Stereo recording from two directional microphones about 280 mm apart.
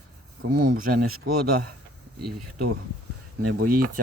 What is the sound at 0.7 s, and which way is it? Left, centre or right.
Speech, right.